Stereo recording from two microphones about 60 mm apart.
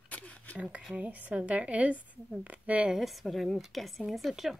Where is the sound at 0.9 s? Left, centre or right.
Right.